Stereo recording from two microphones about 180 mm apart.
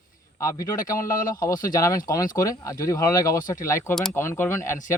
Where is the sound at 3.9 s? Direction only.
Centre (ahead or behind).